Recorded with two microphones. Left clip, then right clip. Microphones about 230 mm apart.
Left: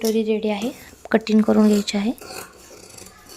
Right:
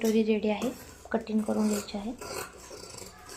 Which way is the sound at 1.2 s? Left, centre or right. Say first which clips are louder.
Left 14 dB; left.